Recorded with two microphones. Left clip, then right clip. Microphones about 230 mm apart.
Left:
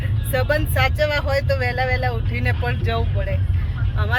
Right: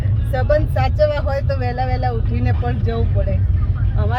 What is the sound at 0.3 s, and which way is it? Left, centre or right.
Speech, centre.